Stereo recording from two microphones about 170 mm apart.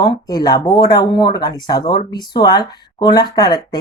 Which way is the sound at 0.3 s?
25° left (ahead or behind).